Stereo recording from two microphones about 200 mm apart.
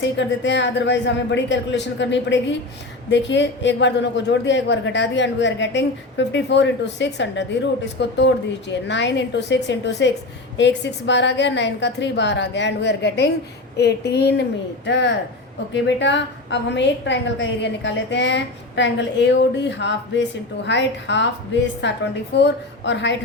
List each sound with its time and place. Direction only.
0.2 s a woman's voice: 60° left (ahead or behind)